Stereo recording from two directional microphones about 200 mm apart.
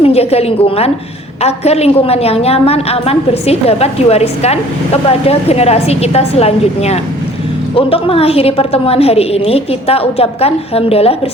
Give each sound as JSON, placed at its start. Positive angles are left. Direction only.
{"t": 0.0, "sound": "a woman's voice", "side_deg": 30}